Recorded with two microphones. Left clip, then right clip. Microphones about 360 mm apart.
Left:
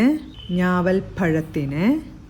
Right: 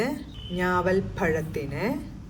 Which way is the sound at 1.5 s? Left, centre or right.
Left.